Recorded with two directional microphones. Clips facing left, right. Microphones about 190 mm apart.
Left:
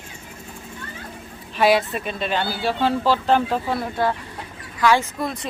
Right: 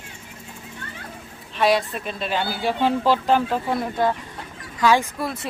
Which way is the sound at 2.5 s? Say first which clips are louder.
Right 2 dB; 15° right (ahead or behind).